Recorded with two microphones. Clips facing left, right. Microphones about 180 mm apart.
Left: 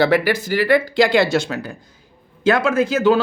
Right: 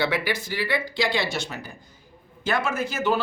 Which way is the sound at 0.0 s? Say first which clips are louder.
Left 9 dB; 40° left (ahead or behind).